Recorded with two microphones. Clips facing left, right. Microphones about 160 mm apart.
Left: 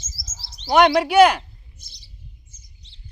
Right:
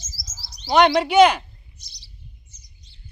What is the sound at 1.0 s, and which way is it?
Speech, 10° left (ahead or behind).